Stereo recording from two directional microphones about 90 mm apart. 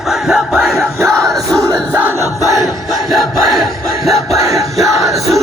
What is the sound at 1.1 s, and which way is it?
Crowd, 5° left (ahead or behind).